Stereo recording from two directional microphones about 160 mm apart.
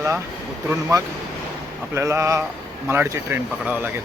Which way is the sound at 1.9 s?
15° right (ahead or behind).